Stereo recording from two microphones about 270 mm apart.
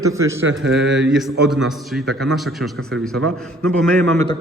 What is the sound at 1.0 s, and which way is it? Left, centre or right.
A man's voice, centre.